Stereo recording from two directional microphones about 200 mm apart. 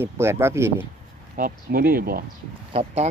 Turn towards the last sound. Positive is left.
turn(degrees=-35)  # may be behind; listen again after turning